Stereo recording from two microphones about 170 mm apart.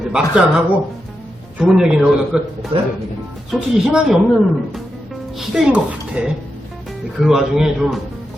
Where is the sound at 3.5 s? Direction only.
5° right (ahead or behind).